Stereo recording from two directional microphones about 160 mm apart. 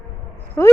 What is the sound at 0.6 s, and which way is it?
Speech, 15° left (ahead or behind).